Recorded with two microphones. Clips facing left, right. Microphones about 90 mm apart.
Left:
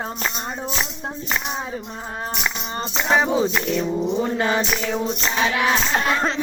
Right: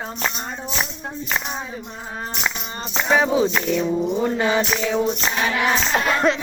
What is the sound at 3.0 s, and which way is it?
Speech, centre (ahead or behind).